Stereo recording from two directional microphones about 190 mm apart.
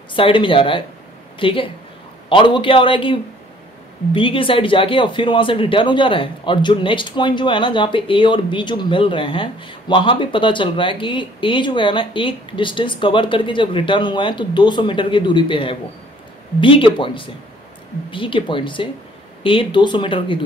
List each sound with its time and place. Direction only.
0.1 s speech: 25° left (ahead or behind)